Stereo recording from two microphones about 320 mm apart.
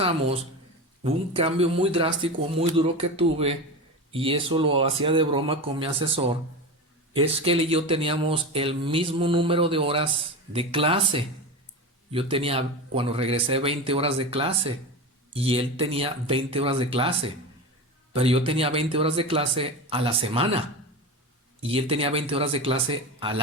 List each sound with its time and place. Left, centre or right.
1.0 s speech: centre